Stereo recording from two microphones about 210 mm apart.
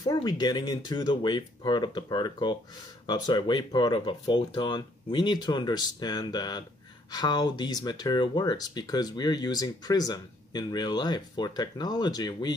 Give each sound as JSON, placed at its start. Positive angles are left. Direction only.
{"t": 0.0, "sound": "speech", "side_deg": 20}